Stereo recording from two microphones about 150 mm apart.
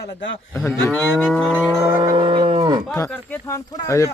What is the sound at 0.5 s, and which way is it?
Speech, 15° left (ahead or behind).